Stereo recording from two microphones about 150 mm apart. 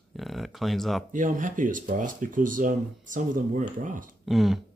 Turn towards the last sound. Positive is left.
turn(degrees=0)  # may be behind; listen again after turning